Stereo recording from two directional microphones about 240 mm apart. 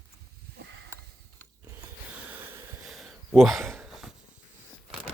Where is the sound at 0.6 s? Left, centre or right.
Right.